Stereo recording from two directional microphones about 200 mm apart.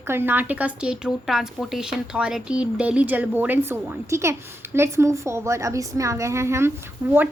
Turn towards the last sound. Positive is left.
turn(degrees=-10)  # may be behind; listen again after turning